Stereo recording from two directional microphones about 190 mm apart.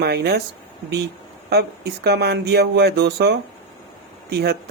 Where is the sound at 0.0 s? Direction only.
60° right (ahead or behind).